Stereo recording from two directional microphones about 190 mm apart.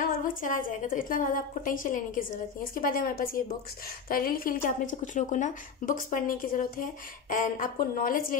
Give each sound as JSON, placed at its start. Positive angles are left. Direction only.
{"t": 0.0, "sound": "a woman's voice", "side_deg": 45}